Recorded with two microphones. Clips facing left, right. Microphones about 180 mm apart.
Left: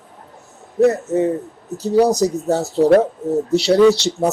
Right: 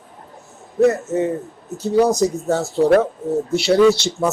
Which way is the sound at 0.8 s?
35° left (ahead or behind).